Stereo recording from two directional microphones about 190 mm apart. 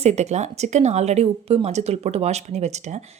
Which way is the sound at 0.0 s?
35° right (ahead or behind).